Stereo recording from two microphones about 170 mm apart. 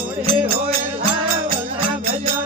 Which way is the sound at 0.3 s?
35° right (ahead or behind).